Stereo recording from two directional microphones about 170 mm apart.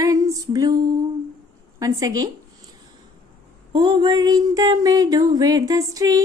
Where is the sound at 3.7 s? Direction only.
25° right (ahead or behind).